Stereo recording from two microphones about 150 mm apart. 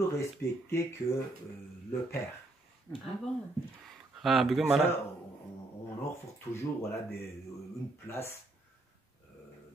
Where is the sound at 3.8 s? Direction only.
Centre (ahead or behind).